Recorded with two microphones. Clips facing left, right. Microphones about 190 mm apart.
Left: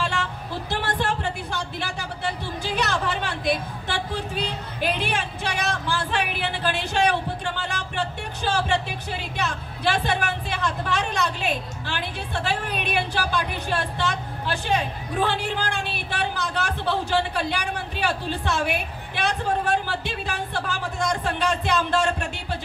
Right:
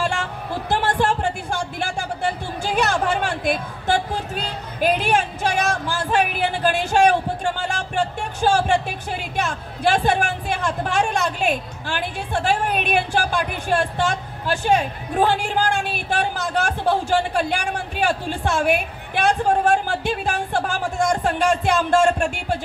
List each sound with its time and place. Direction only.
0.0 s music: 50° right (ahead or behind)
4.7 s speech: 45° right (ahead or behind)